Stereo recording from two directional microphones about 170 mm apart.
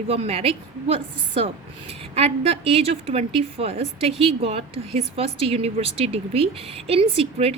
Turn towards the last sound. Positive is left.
turn(degrees=-35)  # may be behind; listen again after turning